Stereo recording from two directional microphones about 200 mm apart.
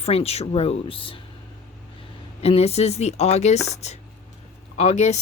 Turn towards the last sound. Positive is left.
turn(degrees=35)  # may be behind; listen again after turning